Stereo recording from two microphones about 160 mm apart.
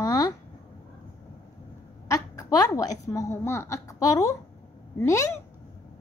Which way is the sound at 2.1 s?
20° left (ahead or behind).